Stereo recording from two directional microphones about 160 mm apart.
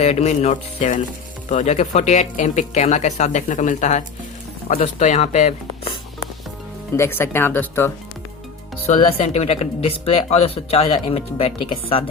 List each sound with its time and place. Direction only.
0.0 s speech: 45° left (ahead or behind)
6.9 s speech: 15° left (ahead or behind)
8.9 s speech: 40° left (ahead or behind)